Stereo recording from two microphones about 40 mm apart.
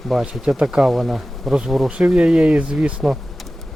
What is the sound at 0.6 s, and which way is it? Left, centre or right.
Speech, centre.